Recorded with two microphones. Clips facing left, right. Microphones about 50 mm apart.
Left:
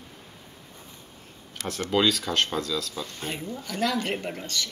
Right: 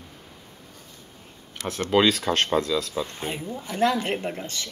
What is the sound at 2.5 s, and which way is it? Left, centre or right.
A woman's voice, right.